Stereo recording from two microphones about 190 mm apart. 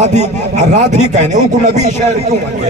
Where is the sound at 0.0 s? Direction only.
40° right (ahead or behind).